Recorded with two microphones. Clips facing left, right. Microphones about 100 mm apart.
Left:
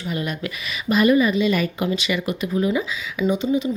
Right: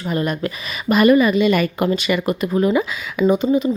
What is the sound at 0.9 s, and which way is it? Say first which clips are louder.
Speech: right 4 dB; 60° right (ahead or behind).